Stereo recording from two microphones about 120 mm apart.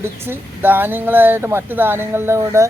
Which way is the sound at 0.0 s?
15° right (ahead or behind).